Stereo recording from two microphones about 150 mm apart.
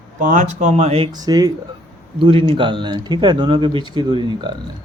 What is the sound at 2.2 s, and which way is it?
Speech, 40° right (ahead or behind).